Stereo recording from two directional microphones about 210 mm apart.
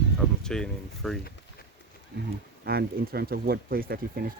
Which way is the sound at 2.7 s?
45° right (ahead or behind).